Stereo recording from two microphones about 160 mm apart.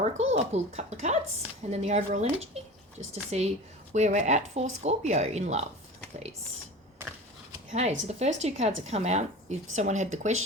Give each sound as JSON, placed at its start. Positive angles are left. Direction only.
{"t": 0.0, "sound": "speech", "side_deg": -45}
{"t": 7.7, "sound": "speech", "side_deg": -45}